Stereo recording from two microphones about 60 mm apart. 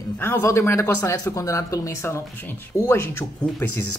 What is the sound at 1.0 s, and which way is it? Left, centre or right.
Speech, left.